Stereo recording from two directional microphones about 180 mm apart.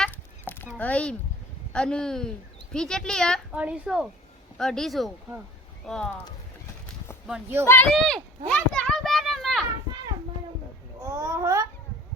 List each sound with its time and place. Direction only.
0.0 s a sound: 10° left (ahead or behind)
0.8 s speech: 10° left (ahead or behind)
7.3 s speech: 10° right (ahead or behind)
7.7 s speech: 10° left (ahead or behind)
7.9 s a sound: centre (ahead or behind)
11.0 s babbling: 20° right (ahead or behind)